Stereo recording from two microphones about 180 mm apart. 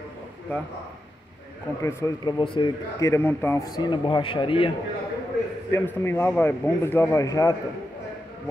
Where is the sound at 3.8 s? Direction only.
25° left (ahead or behind).